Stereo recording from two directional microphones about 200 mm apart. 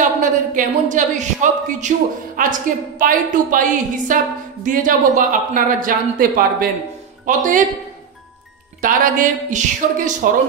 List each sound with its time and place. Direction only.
0.0 s a woman's voice: 40° right (ahead or behind)
8.8 s a woman's voice: 40° right (ahead or behind)